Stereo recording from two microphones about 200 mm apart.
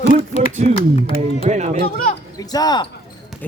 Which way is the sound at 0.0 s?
30° left (ahead or behind).